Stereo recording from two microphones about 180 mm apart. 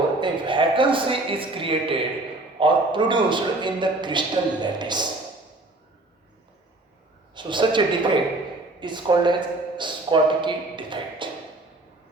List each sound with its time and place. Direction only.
0.2 s a man's voice: 25° right (ahead or behind)
7.3 s a man's voice: 25° right (ahead or behind)